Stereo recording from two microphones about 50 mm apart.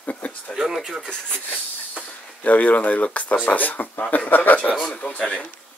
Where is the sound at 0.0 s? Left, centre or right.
Left.